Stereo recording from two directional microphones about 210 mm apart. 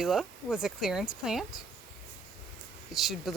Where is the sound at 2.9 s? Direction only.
Centre (ahead or behind).